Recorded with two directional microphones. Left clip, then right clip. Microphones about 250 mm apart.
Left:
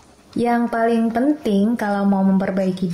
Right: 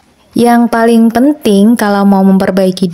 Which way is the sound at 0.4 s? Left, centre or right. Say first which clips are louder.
Right 10 dB; right.